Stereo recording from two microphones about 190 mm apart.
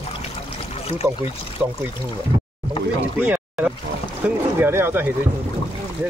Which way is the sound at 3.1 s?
10° right (ahead or behind).